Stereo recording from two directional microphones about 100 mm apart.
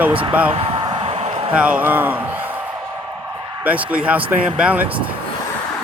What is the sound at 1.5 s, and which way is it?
Speech, 10° right (ahead or behind).